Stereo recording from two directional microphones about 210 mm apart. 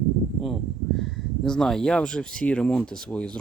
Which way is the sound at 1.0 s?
Centre (ahead or behind).